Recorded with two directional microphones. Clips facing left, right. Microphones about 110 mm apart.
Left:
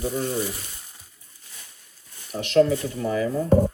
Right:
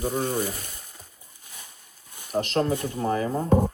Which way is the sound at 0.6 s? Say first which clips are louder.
Right 2 dB; 15° right (ahead or behind).